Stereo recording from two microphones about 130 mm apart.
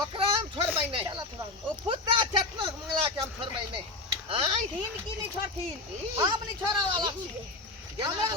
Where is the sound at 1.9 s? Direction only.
40° right (ahead or behind).